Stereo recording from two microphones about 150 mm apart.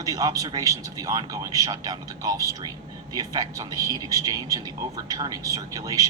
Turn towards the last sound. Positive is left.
turn(degrees=-25)  # may be behind; listen again after turning